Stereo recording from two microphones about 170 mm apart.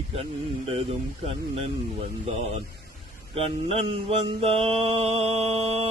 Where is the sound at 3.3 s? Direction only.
30° right (ahead or behind).